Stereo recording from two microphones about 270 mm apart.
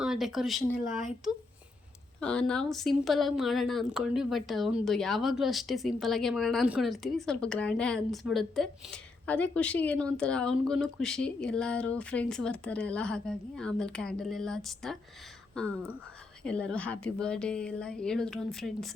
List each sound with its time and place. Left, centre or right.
0.0 s a woman's voice: centre